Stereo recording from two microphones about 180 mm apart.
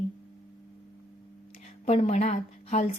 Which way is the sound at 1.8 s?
35° left (ahead or behind).